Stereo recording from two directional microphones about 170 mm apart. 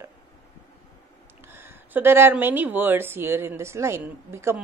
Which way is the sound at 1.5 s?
10° right (ahead or behind).